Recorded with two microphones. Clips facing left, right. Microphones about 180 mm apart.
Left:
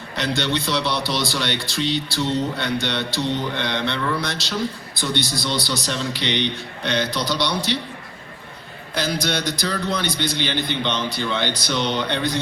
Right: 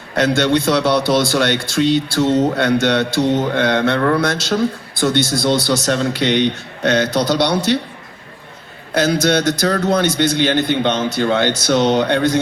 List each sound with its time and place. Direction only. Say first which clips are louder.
0.1 s a man's voice: right 9 dB; 50° right (ahead or behind)
9.0 s a man's voice: right 9 dB; 50° right (ahead or behind)